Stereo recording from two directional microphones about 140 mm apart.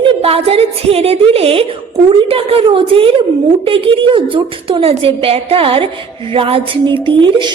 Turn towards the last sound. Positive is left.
turn(degrees=-35)  # may be behind; listen again after turning